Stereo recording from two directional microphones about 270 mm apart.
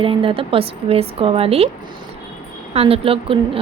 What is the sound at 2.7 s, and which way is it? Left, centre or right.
Speech, right.